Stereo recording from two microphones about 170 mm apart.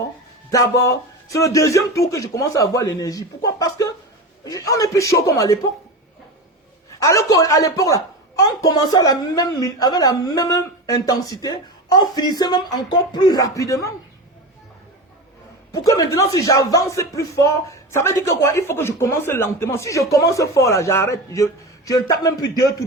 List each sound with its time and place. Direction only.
0.5 s a woman's voice: 20° left (ahead or behind)
7.0 s a woman's voice: 15° left (ahead or behind)
15.7 s a woman's voice: 20° left (ahead or behind)